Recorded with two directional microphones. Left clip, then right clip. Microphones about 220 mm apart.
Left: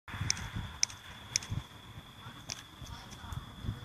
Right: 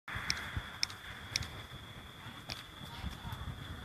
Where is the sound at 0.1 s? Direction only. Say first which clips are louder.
Even; 35° right (ahead or behind).